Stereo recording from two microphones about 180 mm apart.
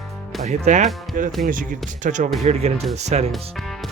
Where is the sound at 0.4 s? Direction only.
40° right (ahead or behind).